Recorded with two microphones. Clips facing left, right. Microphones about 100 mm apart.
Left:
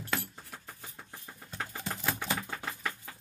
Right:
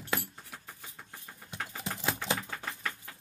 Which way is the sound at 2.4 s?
5° left (ahead or behind).